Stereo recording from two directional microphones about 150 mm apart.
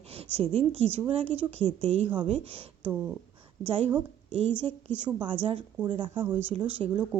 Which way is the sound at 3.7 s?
40° right (ahead or behind).